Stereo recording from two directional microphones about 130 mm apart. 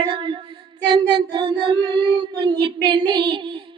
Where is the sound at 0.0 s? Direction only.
40° right (ahead or behind).